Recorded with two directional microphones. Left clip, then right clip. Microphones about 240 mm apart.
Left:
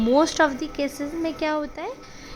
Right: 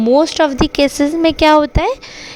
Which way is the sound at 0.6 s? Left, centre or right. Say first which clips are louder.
Right 15 dB; right.